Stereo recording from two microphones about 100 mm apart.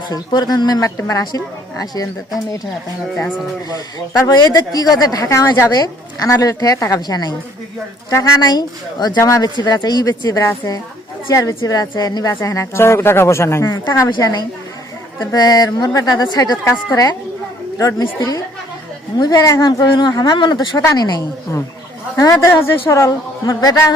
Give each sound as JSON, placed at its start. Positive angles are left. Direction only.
{"t": 0.1, "sound": "a woman's voice", "side_deg": 50}
{"t": 4.1, "sound": "a woman's voice", "side_deg": 40}